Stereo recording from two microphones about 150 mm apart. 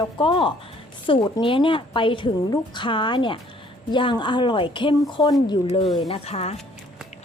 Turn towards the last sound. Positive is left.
turn(degrees=45)  # may be behind; listen again after turning